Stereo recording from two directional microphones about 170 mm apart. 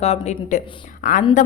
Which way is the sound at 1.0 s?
50° left (ahead or behind).